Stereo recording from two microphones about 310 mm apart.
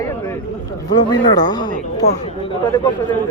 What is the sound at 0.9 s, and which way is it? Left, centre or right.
Speech, centre.